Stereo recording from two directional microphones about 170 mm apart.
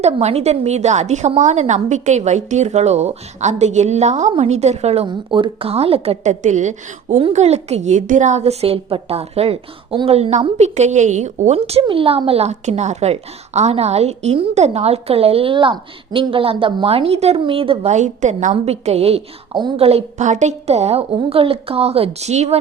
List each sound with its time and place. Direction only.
0.0 s a woman's voice: 40° right (ahead or behind)